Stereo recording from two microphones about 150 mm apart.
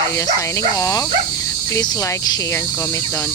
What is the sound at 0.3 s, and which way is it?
Speech, 20° left (ahead or behind).